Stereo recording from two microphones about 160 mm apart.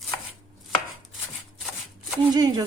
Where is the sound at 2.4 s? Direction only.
25° right (ahead or behind).